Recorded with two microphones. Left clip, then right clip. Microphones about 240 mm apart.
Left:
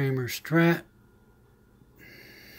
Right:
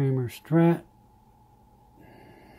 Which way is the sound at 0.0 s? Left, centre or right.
Centre.